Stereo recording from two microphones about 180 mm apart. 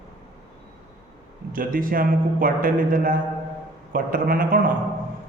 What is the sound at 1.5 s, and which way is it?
A man's voice, 50° right (ahead or behind).